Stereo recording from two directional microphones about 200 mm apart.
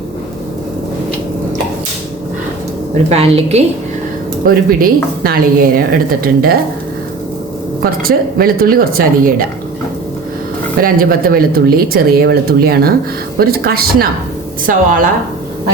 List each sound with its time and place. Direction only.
3.1 s a woman's voice: 30° right (ahead or behind)
4.4 s a woman's voice: 45° right (ahead or behind)
8.0 s a woman's voice: 45° right (ahead or behind)
10.8 s a woman's voice: 45° right (ahead or behind)